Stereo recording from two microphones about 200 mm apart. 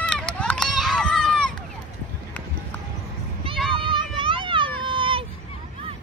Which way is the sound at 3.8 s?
25° right (ahead or behind).